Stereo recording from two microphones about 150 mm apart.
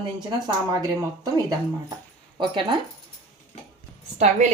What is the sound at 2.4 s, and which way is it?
Speech, 35° right (ahead or behind).